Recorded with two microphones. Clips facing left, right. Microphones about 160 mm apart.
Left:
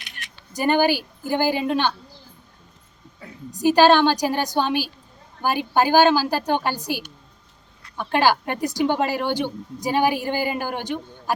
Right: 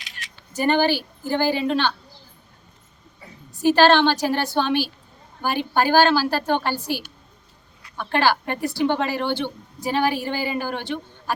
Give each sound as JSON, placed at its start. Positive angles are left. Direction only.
{"t": 0.0, "sound": "a sound", "side_deg": 55}
{"t": 0.7, "sound": "a woman's voice", "side_deg": 10}
{"t": 3.6, "sound": "a woman's voice", "side_deg": 15}